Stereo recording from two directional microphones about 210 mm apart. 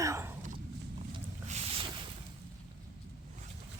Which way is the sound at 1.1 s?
30° right (ahead or behind).